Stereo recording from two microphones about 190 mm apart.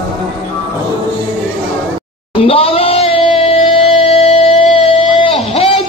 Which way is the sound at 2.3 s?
30° left (ahead or behind).